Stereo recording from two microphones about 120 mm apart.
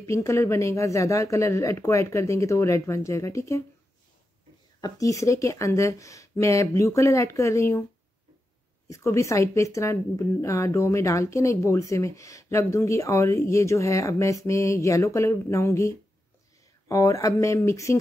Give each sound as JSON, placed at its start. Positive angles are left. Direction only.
{"t": 0.0, "sound": "speech", "side_deg": 25}
{"t": 4.8, "sound": "speech", "side_deg": 30}
{"t": 8.8, "sound": "speech", "side_deg": 25}